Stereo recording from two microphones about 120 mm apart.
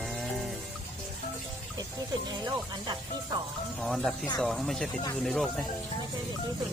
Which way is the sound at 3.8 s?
Centre (ahead or behind).